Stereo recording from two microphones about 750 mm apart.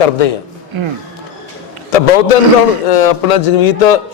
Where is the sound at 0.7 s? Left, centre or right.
Right.